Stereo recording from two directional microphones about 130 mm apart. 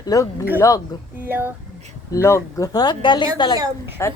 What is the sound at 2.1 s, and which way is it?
A woman's voice, 25° left (ahead or behind).